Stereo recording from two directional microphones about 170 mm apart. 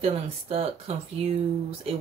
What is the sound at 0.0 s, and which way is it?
Speech, 35° right (ahead or behind).